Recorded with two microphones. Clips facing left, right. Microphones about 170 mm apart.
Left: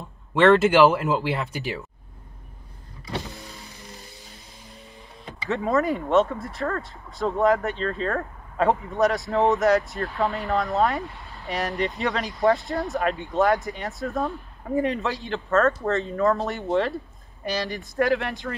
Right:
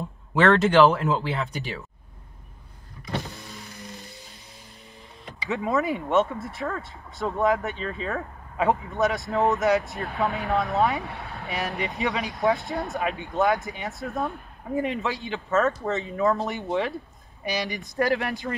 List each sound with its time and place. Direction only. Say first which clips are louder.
0.3 s speech: left 3 dB; centre (ahead or behind)
3.3 s power windows: even; 20° left (ahead or behind)
5.5 s speech: left 2 dB; centre (ahead or behind)
11.1 s vehicle: right 5 dB; 65° right (ahead or behind)
11.4 s speech: left 4 dB; centre (ahead or behind)
17.4 s speech: left 1 dB; 15° right (ahead or behind)
17.9 s speech: left 2 dB; centre (ahead or behind)